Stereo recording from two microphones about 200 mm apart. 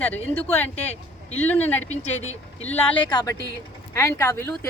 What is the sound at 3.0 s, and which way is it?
Speech, 20° left (ahead or behind).